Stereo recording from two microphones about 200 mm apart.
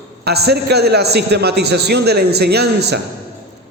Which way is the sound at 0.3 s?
55° right (ahead or behind).